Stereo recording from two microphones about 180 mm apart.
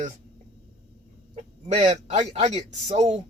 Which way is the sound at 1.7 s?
40° right (ahead or behind).